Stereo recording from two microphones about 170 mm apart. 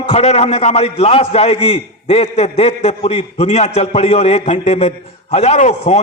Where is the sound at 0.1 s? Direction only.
40° left (ahead or behind).